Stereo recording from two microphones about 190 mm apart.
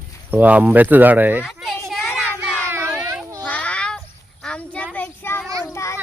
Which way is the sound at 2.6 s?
10° right (ahead or behind).